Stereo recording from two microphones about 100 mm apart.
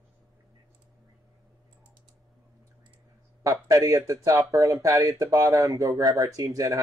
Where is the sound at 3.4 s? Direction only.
35° right (ahead or behind).